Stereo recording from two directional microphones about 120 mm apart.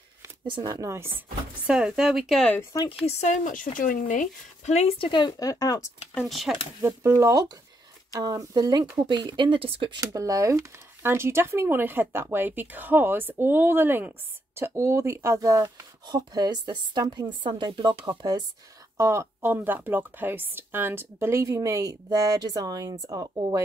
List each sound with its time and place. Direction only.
0.5 s speech: 35° right (ahead or behind)
1.7 s speech: 5° right (ahead or behind)
3.1 s speech: 80° left
4.9 s speech: 45° left (ahead or behind)
6.2 s speech: centre (ahead or behind)
6.8 s speech: 25° right (ahead or behind); by 9.9 s 45° right (ahead or behind)
9.9 s speech: 30° right (ahead or behind)
18.9 s speech: 25° right (ahead or behind)